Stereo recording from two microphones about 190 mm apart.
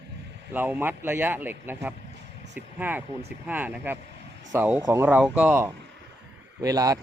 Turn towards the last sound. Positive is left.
turn(degrees=-20)  # may be behind; listen again after turning